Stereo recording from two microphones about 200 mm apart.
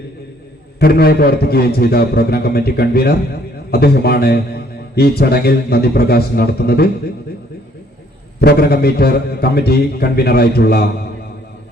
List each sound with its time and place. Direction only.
0.8 s a man's voice: 50° left (ahead or behind)
8.4 s a man's voice: 50° left (ahead or behind)